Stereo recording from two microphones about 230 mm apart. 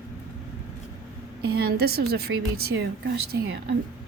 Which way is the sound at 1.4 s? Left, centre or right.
Right.